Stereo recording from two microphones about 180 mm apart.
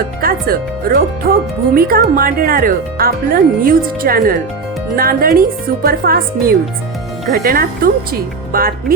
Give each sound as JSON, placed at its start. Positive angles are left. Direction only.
{"t": 0.2, "sound": "speech", "side_deg": -55}
{"t": 7.3, "sound": "speech", "side_deg": -55}